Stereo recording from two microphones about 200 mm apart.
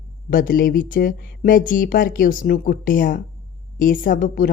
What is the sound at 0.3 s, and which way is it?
A woman's voice, 45° left (ahead or behind).